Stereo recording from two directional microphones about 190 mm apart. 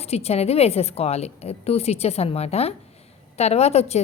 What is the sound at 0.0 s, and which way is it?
A woman's voice, 35° left (ahead or behind).